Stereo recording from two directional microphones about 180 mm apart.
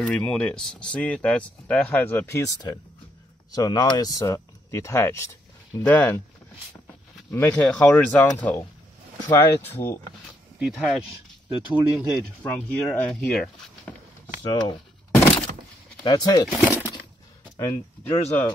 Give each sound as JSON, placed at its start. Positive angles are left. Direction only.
{"t": 0.0, "sound": "speech", "side_deg": 5}
{"t": 7.3, "sound": "speech", "side_deg": 15}
{"t": 10.6, "sound": "speech", "side_deg": 0}
{"t": 12.1, "sound": "speech", "side_deg": 5}
{"t": 14.4, "sound": "breaking", "side_deg": 25}
{"t": 16.0, "sound": "speech", "side_deg": 20}
{"t": 16.4, "sound": "speech", "side_deg": -5}
{"t": 17.6, "sound": "speech", "side_deg": 35}